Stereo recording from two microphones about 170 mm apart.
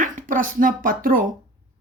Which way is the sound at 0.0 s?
50° right (ahead or behind).